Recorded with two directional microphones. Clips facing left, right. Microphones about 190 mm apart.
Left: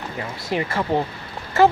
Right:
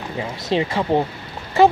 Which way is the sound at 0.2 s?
20° right (ahead or behind).